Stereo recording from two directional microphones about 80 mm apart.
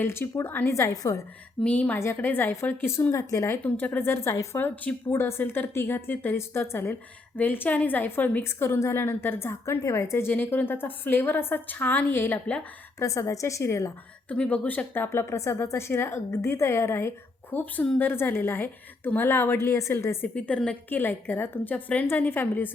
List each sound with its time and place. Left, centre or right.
0.0 s a woman's voice: left
1.6 s speech: centre
2.0 s a woman's voice: left
3.6 s a woman's voice: left
4.5 s a woman's voice: left
5.1 s a woman's voice: left
13.0 s a woman's voice: left
14.3 s a woman's voice: centre; by 20.1 s left
20.2 s speech: centre
20.7 s a woman's voice: left